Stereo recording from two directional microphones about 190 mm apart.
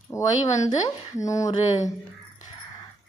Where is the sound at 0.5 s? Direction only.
40° left (ahead or behind).